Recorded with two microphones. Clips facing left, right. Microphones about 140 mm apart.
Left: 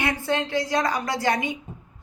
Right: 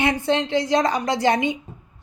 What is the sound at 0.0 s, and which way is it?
A woman's voice, 20° right (ahead or behind).